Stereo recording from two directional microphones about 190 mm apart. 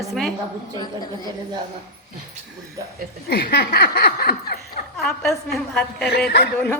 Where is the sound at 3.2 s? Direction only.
55° left (ahead or behind).